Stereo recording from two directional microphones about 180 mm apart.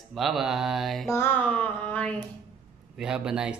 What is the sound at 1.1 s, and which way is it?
Speech, 10° left (ahead or behind).